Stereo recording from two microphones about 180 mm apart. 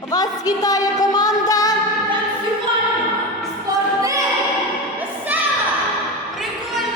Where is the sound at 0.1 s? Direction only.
20° left (ahead or behind).